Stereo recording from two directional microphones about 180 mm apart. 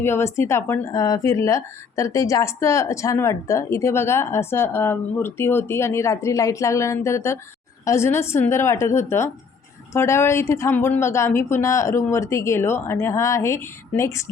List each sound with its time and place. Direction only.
0.0 s a woman's voice: 15° left (ahead or behind)